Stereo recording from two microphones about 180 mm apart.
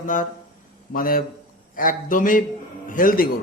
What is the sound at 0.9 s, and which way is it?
A man's voice, 55° left (ahead or behind).